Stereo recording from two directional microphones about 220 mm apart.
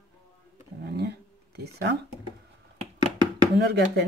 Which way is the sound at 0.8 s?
50° right (ahead or behind).